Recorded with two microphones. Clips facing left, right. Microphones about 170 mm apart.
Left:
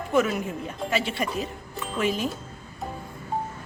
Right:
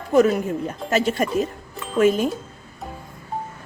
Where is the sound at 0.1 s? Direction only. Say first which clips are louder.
Right 7 dB; 40° right (ahead or behind).